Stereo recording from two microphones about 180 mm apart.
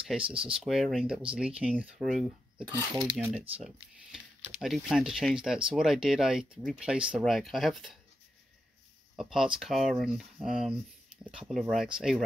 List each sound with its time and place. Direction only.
0.1 s speech: 5° right (ahead or behind)
9.2 s speech: centre (ahead or behind)